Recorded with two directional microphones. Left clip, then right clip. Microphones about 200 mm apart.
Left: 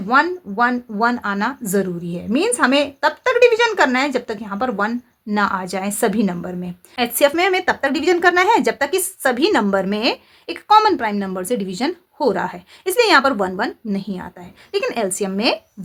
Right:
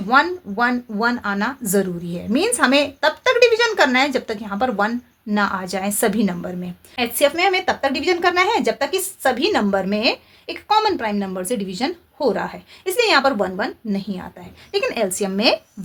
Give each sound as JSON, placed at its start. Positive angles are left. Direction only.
{"t": 0.1, "sound": "a woman's voice", "side_deg": 15}